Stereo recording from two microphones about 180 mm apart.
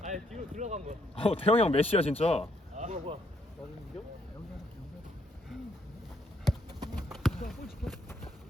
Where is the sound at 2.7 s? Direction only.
45° right (ahead or behind).